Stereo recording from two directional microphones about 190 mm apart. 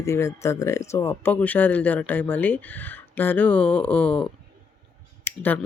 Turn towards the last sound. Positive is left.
turn(degrees=10)  # may be behind; listen again after turning